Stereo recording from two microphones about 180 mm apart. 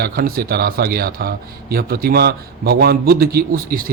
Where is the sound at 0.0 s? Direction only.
55° right (ahead or behind).